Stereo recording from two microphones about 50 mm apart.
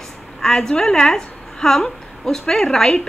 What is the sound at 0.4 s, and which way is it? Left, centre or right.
A woman's voice, centre.